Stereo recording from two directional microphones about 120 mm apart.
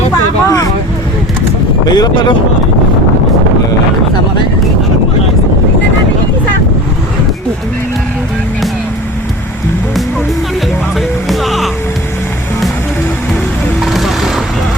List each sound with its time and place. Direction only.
0.1 s vehicle: 30° left (ahead or behind)
1.9 s speech: 35° left (ahead or behind)
11.3 s music: centre (ahead or behind)
13.8 s vehicle: centre (ahead or behind)